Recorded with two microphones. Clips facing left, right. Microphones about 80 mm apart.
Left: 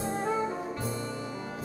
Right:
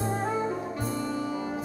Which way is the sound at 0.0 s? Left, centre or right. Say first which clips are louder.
Right 2 dB; right.